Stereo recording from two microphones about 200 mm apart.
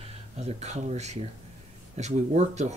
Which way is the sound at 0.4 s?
35° right (ahead or behind).